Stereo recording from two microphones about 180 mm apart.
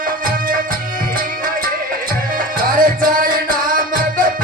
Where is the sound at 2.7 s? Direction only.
50° right (ahead or behind).